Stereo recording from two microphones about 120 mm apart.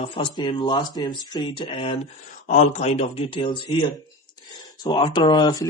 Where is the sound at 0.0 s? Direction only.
45° left (ahead or behind).